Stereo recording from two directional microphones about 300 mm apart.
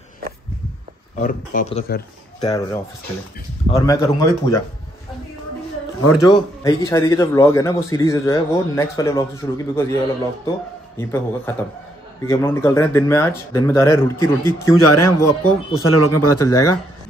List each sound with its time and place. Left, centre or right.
1.1 s speech: left
2.4 s a man's voice: centre
6.2 s a man's voice: centre
14.7 s speech: left
15.1 s a man's voice: centre
15.8 s speech: left
16.4 s a man's voice: centre